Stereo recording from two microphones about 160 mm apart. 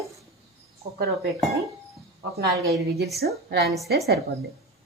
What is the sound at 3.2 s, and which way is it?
Speech, 90° right.